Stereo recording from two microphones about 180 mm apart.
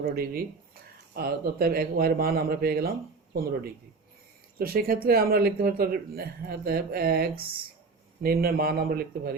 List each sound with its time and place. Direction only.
0.0 s speech: 60° right (ahead or behind)